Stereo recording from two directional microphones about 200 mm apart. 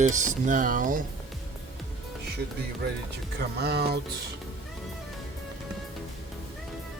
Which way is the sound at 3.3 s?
55° right (ahead or behind).